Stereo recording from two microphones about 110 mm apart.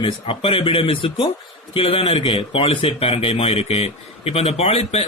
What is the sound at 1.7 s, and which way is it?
A man's voice, 60° left (ahead or behind).